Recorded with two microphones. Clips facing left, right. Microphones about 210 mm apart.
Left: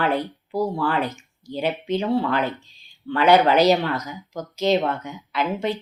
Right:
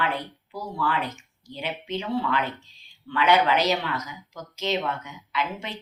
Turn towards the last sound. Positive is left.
turn(degrees=35)  # may be behind; listen again after turning